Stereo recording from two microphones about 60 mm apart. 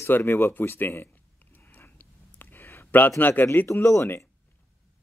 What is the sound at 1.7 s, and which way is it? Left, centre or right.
Clicking, left.